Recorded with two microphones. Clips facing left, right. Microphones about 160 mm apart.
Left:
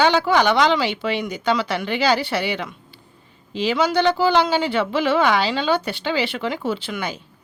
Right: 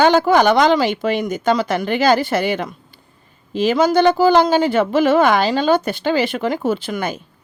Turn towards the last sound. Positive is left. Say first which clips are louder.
# right 5 dB
turn(degrees=-45)  # may be behind; listen again after turning